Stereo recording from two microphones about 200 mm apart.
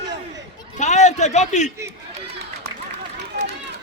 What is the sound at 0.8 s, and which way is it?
Speech, 35° left (ahead or behind).